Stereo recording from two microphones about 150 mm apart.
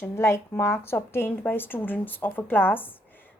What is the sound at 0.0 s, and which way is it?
Speech, 15° left (ahead or behind).